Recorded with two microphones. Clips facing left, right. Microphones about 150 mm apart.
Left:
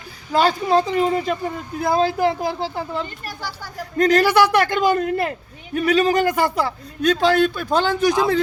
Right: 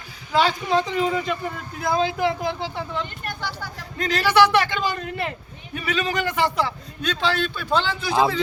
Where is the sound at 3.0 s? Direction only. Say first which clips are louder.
Left 1 dB; 5° left (ahead or behind).